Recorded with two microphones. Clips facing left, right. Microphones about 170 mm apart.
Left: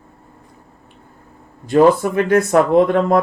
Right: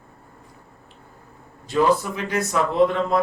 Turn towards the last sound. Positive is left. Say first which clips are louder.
# left 6 dB
turn(degrees=55)  # may be behind; listen again after turning